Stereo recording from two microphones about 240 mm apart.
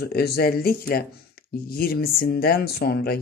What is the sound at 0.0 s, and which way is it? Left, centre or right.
Speech, left.